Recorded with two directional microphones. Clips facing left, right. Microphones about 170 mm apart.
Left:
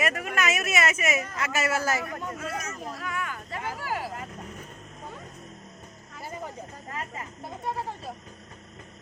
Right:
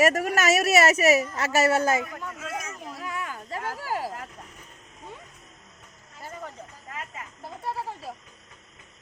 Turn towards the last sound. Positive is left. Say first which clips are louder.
# even
turn(degrees=-5)  # may be behind; listen again after turning